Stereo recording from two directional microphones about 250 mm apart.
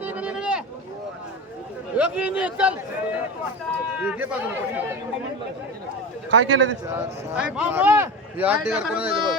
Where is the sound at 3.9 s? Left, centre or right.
Centre.